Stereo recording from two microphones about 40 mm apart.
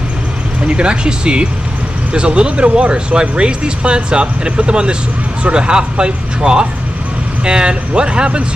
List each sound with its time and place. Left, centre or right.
0.7 s speech: right